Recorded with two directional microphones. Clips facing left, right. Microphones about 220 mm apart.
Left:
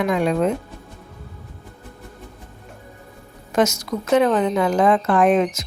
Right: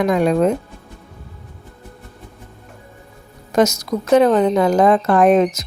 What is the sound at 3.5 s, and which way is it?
Speech, 40° right (ahead or behind).